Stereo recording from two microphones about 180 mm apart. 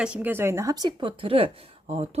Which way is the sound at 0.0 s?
10° right (ahead or behind).